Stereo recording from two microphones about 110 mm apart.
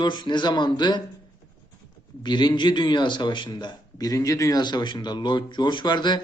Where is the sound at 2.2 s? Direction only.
40° left (ahead or behind).